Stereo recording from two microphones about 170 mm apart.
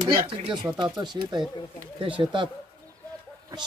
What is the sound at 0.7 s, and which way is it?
Speech, 25° right (ahead or behind).